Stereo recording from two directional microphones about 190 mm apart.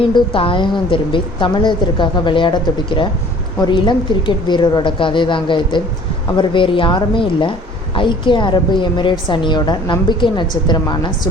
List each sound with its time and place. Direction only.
0.1 s a woman's voice: 25° left (ahead or behind)